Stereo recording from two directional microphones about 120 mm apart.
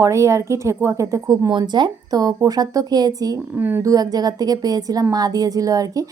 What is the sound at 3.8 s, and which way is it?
A woman's voice, 30° right (ahead or behind).